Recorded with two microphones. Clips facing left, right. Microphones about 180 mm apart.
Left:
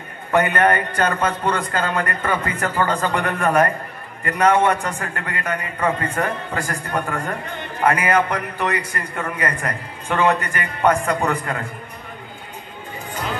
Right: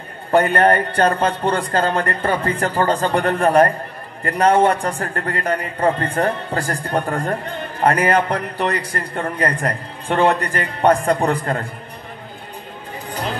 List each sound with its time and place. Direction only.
0.3 s a man's voice: 35° right (ahead or behind)
13.1 s music: 35° right (ahead or behind)